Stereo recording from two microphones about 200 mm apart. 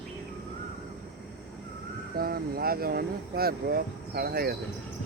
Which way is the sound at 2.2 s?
50° right (ahead or behind).